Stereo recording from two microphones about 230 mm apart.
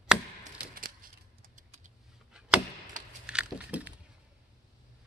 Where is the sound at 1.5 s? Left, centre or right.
Right.